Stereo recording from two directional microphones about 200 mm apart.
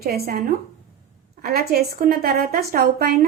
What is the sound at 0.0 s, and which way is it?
Speech, 50° right (ahead or behind).